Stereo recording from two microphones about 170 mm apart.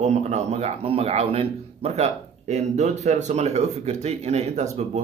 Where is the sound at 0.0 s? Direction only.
40° right (ahead or behind).